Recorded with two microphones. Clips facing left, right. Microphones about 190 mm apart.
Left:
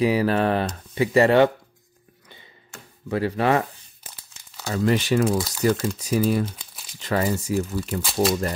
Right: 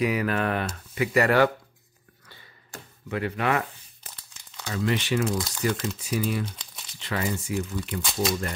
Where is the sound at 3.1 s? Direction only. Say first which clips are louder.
Left 5 dB; 35° left (ahead or behind).